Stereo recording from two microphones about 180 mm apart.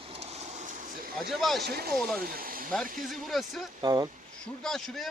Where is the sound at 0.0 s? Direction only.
35° right (ahead or behind).